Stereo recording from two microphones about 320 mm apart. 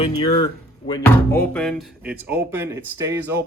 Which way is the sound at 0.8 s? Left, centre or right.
Centre.